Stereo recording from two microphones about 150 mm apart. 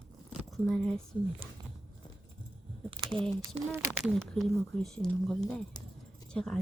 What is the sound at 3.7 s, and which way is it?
Speech, 20° right (ahead or behind).